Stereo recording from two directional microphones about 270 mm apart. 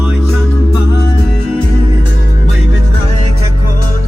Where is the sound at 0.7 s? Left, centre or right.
Centre.